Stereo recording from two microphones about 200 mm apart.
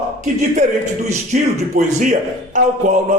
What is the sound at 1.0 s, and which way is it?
A man's voice, 35° right (ahead or behind).